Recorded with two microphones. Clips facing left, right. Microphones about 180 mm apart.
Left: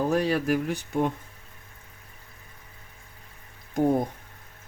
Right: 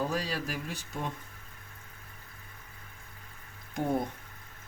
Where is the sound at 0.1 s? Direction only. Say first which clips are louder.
Left 10 dB; 60° left (ahead or behind).